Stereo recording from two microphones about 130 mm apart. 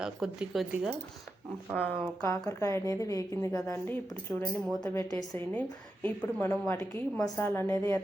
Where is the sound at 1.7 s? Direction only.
10° left (ahead or behind).